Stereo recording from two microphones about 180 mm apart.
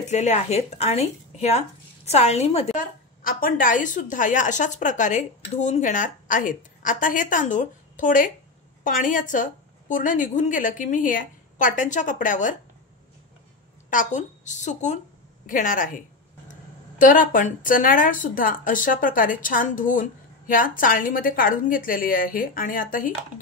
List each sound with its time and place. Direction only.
0.0 s speech: 40° left (ahead or behind)
3.3 s a woman's voice: 50° left (ahead or behind)
13.8 s a woman's voice: 45° left (ahead or behind)
17.0 s a woman's voice: 50° left (ahead or behind)